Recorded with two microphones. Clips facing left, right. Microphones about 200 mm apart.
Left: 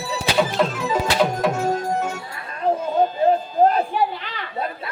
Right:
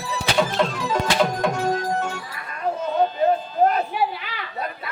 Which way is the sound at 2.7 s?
30° left (ahead or behind).